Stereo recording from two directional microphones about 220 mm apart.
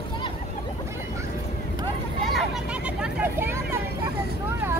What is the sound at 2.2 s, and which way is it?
Vehicle, centre (ahead or behind).